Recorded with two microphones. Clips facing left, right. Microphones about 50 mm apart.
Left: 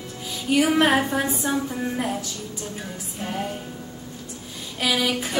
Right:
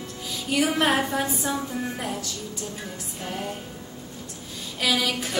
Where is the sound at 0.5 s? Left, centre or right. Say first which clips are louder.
Left 3 dB; centre.